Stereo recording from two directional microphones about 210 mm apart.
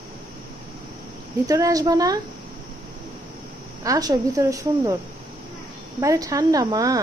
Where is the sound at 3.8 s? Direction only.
20° right (ahead or behind).